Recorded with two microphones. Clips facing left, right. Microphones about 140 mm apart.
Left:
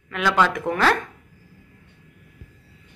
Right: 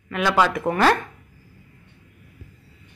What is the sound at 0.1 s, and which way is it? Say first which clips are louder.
Speech: right 1 dB; 10° right (ahead or behind).